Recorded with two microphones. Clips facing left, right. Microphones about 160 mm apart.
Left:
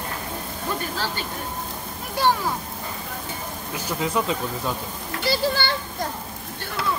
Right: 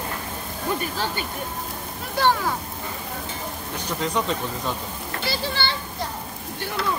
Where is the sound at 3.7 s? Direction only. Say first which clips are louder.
Left 1 dB; 5° left (ahead or behind).